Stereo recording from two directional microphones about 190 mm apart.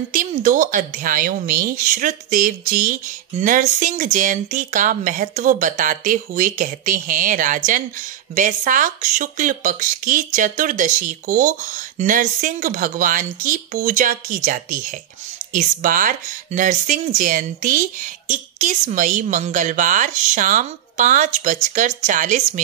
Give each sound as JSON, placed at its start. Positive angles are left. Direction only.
{"t": 0.1, "sound": "speech", "side_deg": -45}